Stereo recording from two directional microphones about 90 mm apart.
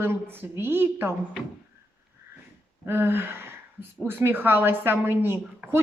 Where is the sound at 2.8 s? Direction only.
25° right (ahead or behind).